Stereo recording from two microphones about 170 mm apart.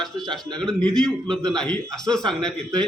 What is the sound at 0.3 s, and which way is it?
Speech, 25° right (ahead or behind).